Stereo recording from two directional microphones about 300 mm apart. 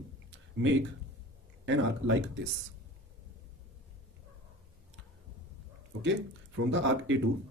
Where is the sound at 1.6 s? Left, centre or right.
Right.